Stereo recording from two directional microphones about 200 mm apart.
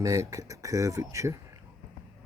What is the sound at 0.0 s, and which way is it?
Speech, 15° right (ahead or behind).